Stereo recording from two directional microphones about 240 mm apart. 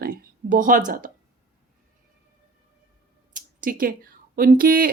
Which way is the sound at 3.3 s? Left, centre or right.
Right.